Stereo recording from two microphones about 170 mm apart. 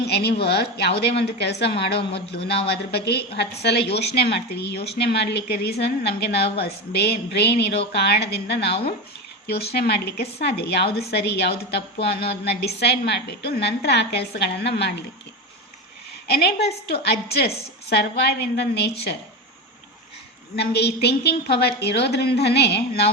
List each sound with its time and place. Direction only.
0.0 s a woman's voice: 70° left (ahead or behind)
16.3 s a woman's voice: 70° left (ahead or behind)
18.2 s a woman's voice: 85° left
20.6 s a woman's voice: 75° left (ahead or behind)